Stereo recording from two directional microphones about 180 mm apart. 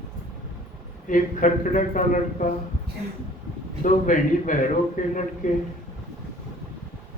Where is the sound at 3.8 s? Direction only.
45° left (ahead or behind).